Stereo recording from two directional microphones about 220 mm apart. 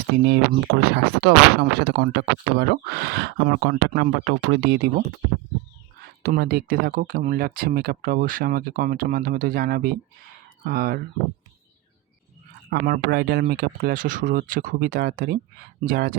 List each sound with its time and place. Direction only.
0.3 s speech: 45° right (ahead or behind)
6.0 s speech: 45° right (ahead or behind)
12.7 s speech: 45° right (ahead or behind)